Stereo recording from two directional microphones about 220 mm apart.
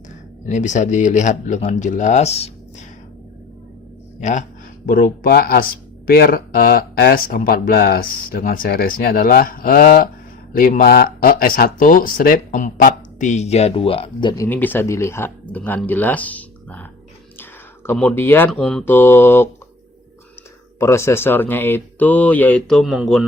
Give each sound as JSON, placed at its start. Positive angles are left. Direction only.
{"t": 0.4, "sound": "speech", "side_deg": 35}
{"t": 4.2, "sound": "speech", "side_deg": 35}
{"t": 14.4, "sound": "speech", "side_deg": 10}
{"t": 17.8, "sound": "speech", "side_deg": 10}
{"t": 20.7, "sound": "speech", "side_deg": 10}